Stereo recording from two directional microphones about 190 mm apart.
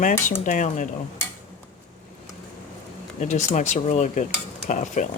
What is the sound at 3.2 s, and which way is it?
Speech, 40° left (ahead or behind).